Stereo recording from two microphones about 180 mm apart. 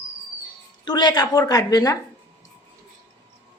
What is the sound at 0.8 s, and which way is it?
A woman's voice, 25° left (ahead or behind).